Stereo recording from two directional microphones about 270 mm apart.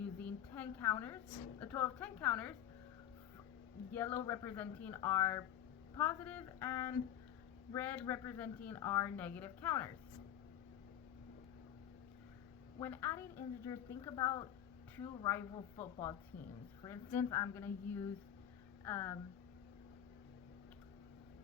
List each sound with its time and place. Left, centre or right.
0.0 s a woman's voice: centre
3.9 s speech: centre
12.8 s speech: centre